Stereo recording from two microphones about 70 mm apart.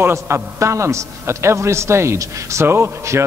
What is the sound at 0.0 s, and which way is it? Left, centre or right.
A man's voice, right.